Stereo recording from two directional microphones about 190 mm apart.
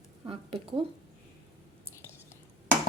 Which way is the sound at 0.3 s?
30° right (ahead or behind).